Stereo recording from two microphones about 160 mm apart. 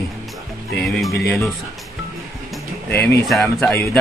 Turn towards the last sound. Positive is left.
turn(degrees=5)  # may be behind; listen again after turning